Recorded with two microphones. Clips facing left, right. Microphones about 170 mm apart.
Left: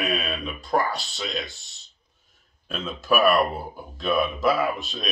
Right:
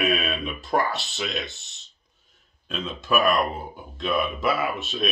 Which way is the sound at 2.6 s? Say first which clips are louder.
Even; 5° left (ahead or behind).